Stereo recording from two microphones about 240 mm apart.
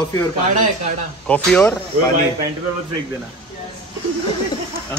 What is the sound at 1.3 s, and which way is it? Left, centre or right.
Speech, centre.